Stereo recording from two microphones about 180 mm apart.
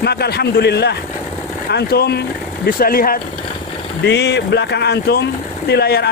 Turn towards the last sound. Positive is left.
turn(degrees=65)  # may be behind; listen again after turning